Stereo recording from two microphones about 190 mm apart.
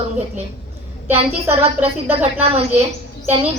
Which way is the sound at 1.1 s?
30° right (ahead or behind).